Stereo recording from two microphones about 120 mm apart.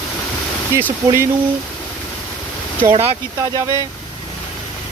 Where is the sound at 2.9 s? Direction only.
55° right (ahead or behind).